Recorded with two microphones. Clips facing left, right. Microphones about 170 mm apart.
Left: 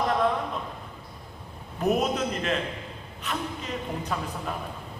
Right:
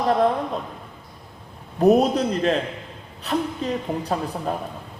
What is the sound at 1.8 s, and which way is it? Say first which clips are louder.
A woman's voice: right 8 dB; 35° right (ahead or behind).